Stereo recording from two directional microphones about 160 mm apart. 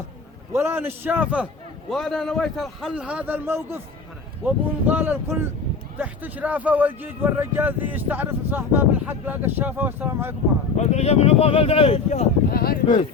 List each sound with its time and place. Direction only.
0.5 s a man's voice: 15° right (ahead or behind)
10.8 s speech: 40° left (ahead or behind)
12.5 s speech: 70° left (ahead or behind)